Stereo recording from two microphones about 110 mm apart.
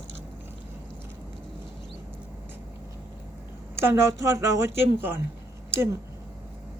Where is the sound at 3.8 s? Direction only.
25° right (ahead or behind).